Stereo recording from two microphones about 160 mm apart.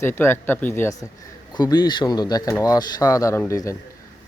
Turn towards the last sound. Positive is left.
turn(degrees=20)  # may be behind; listen again after turning